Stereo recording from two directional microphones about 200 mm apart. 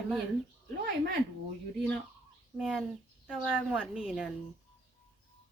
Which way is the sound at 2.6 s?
Centre (ahead or behind).